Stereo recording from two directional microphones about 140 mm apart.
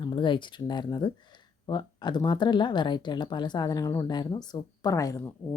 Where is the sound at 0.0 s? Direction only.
35° left (ahead or behind).